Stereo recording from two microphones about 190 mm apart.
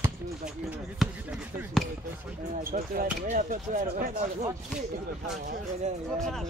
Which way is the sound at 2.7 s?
50° right (ahead or behind).